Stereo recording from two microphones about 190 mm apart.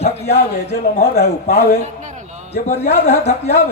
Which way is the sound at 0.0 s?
35° left (ahead or behind).